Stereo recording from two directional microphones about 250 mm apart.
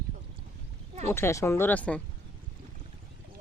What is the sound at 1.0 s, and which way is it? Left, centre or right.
Speech, centre.